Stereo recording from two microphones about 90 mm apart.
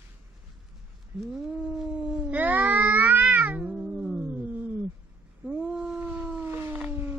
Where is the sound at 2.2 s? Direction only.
20° right (ahead or behind).